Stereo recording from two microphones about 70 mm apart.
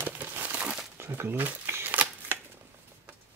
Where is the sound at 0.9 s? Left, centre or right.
Right.